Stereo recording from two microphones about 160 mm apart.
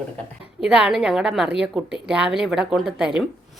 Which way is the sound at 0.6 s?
5° right (ahead or behind).